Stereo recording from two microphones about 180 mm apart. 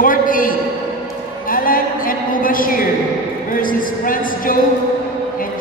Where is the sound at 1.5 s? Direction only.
50° left (ahead or behind).